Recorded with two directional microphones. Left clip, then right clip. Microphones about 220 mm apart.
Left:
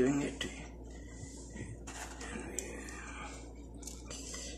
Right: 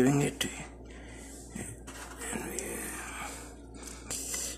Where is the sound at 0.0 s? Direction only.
50° right (ahead or behind).